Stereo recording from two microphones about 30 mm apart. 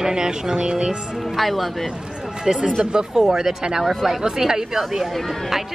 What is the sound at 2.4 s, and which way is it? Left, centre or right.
Speech, right.